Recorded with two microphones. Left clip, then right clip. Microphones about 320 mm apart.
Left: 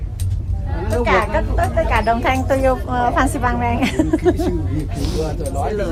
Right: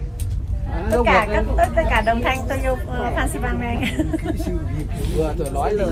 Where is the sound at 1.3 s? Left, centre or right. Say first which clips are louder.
Even; centre.